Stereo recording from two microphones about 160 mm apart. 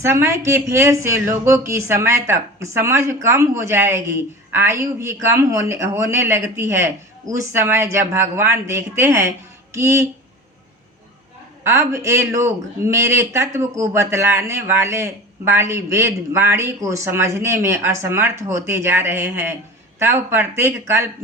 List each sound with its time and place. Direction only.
0.0 s speech: 15° right (ahead or behind)
11.6 s speech: 20° right (ahead or behind)